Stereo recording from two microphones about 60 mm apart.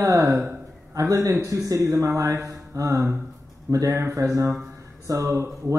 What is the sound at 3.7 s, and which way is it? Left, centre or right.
Speech, right.